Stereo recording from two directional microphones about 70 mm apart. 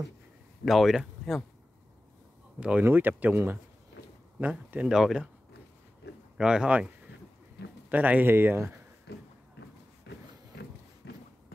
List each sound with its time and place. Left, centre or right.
0.7 s speech: centre
2.8 s speech: right
4.8 s speech: centre
6.3 s speech: centre
7.9 s speech: right